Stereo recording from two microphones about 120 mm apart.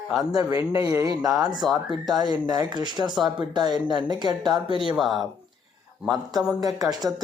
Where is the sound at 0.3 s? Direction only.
30° right (ahead or behind).